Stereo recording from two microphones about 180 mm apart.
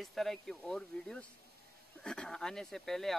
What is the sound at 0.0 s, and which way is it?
Speech, centre (ahead or behind).